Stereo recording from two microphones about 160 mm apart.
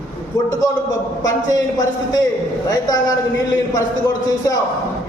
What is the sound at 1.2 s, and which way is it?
A man's voice, 25° left (ahead or behind).